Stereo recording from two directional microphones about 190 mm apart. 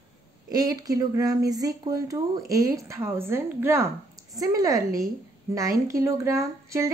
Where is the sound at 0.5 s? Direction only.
20° right (ahead or behind).